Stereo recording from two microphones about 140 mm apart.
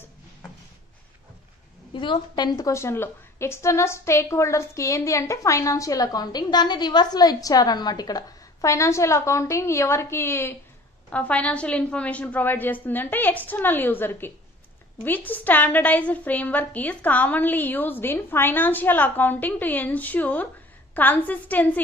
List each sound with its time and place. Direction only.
2.0 s a woman's voice: 35° left (ahead or behind); by 21.8 s 10° left (ahead or behind)